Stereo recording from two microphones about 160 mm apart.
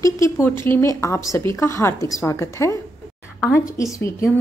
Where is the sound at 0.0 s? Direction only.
15° left (ahead or behind).